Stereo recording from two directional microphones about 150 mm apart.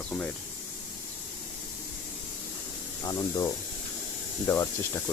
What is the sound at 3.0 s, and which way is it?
Speech, 25° left (ahead or behind).